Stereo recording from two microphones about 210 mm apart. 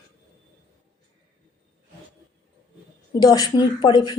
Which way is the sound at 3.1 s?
20° left (ahead or behind).